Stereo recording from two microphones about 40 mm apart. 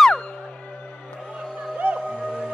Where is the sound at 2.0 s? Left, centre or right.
Right.